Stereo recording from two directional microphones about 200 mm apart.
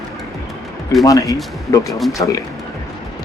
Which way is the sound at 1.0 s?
15° left (ahead or behind).